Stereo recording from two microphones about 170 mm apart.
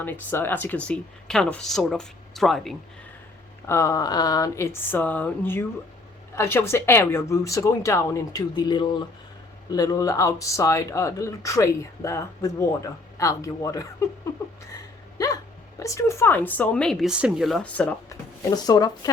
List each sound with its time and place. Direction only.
0.0 s speech: 10° left (ahead or behind)
3.7 s speech: 15° left (ahead or behind)
15.2 s hiccup: 20° left (ahead or behind)
15.8 s speech: 15° left (ahead or behind)
18.1 s speech: 25° left (ahead or behind)